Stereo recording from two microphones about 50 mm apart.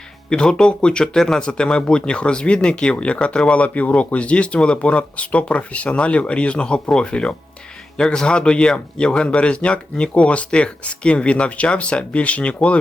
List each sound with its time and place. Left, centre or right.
0.3 s speech: centre